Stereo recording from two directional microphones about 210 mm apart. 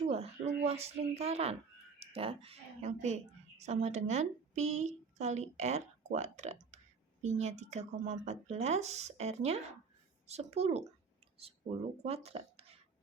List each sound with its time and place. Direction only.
0.1 s a sound: 30° right (ahead or behind)
2.0 s a woman's voice: 25° right (ahead or behind)
12.0 s speech: 30° right (ahead or behind)